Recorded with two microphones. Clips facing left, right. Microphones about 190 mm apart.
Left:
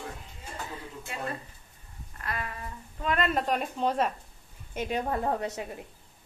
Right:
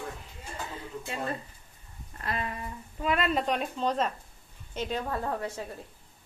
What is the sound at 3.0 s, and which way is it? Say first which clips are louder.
A woman's voice: even; 5° right (ahead or behind).